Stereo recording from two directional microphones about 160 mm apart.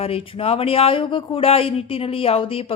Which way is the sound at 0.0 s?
35° left (ahead or behind).